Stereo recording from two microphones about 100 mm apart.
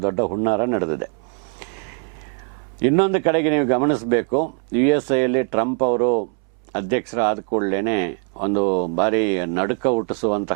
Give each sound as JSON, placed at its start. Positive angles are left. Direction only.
{"t": 0.0, "sound": "speech", "side_deg": -15}
{"t": 2.8, "sound": "speech", "side_deg": -15}